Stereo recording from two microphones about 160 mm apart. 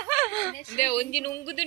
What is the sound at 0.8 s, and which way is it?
Speech, 35° left (ahead or behind).